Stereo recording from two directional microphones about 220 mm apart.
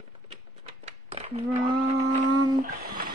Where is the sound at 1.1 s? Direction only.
25° right (ahead or behind).